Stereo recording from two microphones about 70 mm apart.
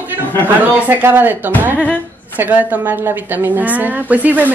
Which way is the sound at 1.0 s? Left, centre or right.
Right.